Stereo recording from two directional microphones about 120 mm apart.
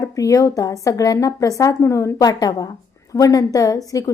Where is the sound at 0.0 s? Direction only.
30° left (ahead or behind).